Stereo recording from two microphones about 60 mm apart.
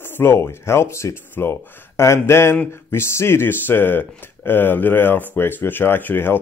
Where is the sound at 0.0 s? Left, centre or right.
Left.